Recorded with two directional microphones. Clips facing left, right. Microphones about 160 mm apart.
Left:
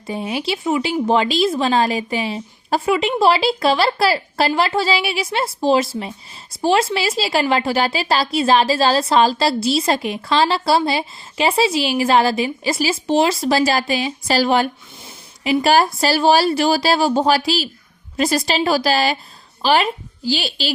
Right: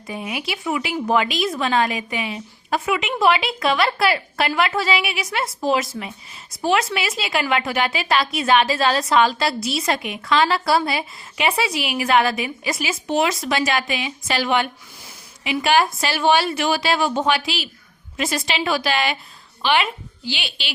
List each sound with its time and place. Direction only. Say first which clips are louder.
0.1 s a woman's voice: left 5 dB; 30° left (ahead or behind)